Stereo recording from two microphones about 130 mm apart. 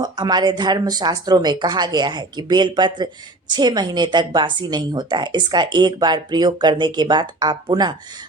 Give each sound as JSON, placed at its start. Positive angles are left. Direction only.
{"t": 0.0, "sound": "a woman's voice", "side_deg": -35}